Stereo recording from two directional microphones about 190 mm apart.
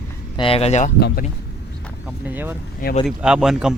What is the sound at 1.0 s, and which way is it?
Speech, 60° left (ahead or behind).